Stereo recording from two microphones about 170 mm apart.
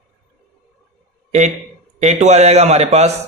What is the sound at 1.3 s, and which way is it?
A man's voice, 40° right (ahead or behind).